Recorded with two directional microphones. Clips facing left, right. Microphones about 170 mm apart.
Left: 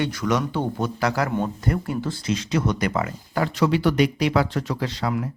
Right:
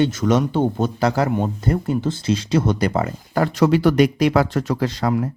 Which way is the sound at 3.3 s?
45° right (ahead or behind).